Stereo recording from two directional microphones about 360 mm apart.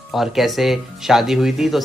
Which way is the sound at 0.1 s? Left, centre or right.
Centre.